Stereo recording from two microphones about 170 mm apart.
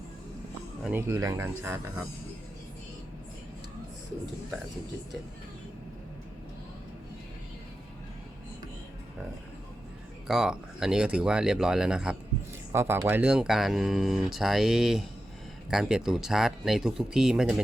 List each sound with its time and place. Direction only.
0.8 s speech: 10° right (ahead or behind)
10.2 s speech: 5° right (ahead or behind)
12.7 s speech: 15° right (ahead or behind)